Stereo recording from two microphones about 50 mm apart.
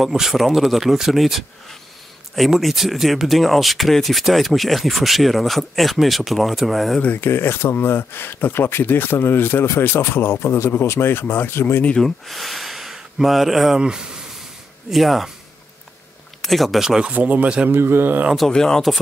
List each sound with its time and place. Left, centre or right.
0.0 s speech: centre
7.2 s speech: left
12.0 s speech: centre
13.7 s speech: centre
16.3 s speech: centre
17.0 s speech: right
17.6 s speech: right
18.5 s speech: centre